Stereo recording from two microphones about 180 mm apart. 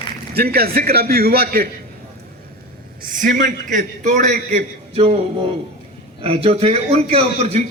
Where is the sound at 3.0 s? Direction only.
50° right (ahead or behind).